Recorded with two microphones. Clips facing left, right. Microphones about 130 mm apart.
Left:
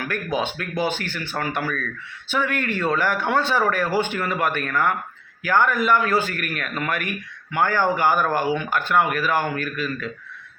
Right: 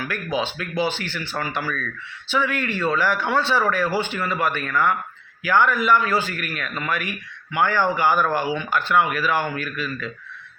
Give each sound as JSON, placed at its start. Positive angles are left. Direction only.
{"t": 0.0, "sound": "a man's voice", "side_deg": 50}